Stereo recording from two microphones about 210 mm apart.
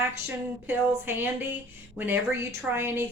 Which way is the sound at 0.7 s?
10° right (ahead or behind).